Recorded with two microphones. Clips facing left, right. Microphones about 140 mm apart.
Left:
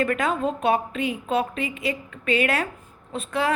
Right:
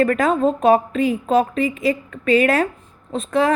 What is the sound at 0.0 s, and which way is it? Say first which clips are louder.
A woman's voice: right 7 dB; 40° right (ahead or behind).